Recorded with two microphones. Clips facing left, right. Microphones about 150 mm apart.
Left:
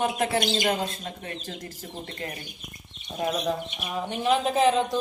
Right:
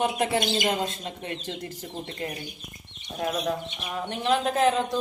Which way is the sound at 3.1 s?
5° left (ahead or behind).